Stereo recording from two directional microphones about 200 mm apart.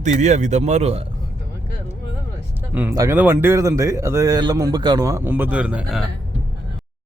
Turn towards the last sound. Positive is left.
turn(degrees=-5)  # may be behind; listen again after turning